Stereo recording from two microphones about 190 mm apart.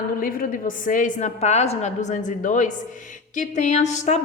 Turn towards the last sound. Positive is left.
turn(degrees=35)  # may be behind; listen again after turning